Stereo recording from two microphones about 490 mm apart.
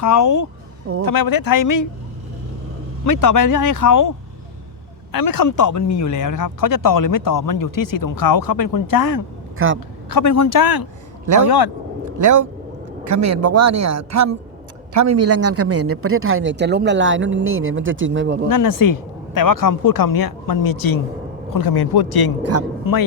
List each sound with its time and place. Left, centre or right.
0.0 s speech: left
3.1 s speech: left
5.1 s speech: left
9.6 s a man's voice: right
10.1 s speech: left
12.2 s a man's voice: right
18.4 s speech: left